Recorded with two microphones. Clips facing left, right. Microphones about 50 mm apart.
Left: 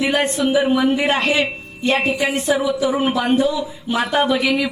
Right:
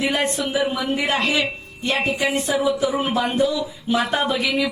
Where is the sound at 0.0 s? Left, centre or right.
Left.